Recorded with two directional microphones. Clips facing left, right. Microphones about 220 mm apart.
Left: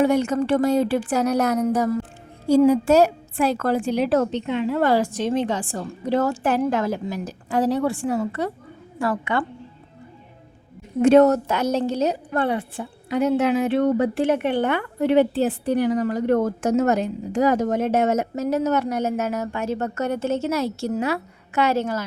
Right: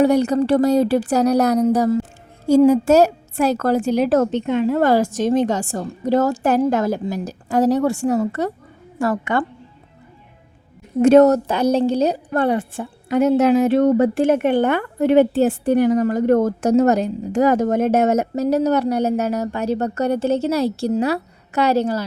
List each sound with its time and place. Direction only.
0.0 s a woman's voice: 40° right (ahead or behind)
2.5 s a woman's voice: 45° right (ahead or behind)
11.0 s a woman's voice: 40° right (ahead or behind)